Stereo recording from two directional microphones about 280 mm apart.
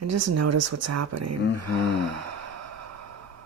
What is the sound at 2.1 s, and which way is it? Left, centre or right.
Sigh, right.